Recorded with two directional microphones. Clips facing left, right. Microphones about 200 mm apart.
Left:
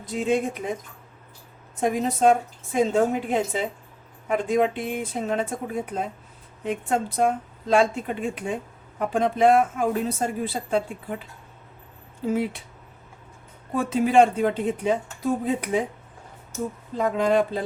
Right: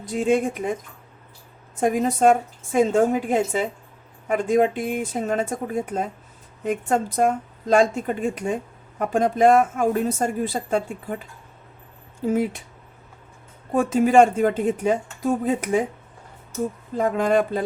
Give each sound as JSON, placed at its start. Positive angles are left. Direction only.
{"t": 0.0, "sound": "speech", "side_deg": -45}
{"t": 1.8, "sound": "speech", "side_deg": -45}
{"t": 12.3, "sound": "speech", "side_deg": -45}
{"t": 13.7, "sound": "speech", "side_deg": -45}
{"t": 17.0, "sound": "speech", "side_deg": -50}